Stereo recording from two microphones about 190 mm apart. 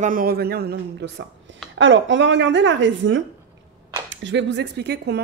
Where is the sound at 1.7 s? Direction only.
80° right.